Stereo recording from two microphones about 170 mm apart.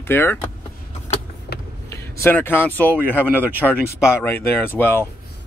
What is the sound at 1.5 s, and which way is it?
Vehicle, 75° left (ahead or behind).